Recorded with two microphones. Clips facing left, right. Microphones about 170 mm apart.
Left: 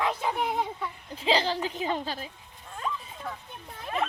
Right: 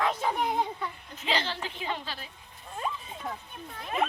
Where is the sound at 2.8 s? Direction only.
20° right (ahead or behind).